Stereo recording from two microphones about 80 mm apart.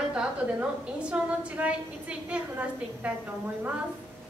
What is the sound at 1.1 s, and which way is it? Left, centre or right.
A woman's voice, centre.